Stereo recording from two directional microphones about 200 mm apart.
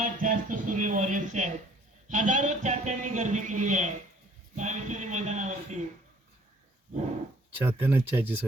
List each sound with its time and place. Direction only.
0.0 s a man's voice: 40° right (ahead or behind)
7.6 s speech: 10° right (ahead or behind)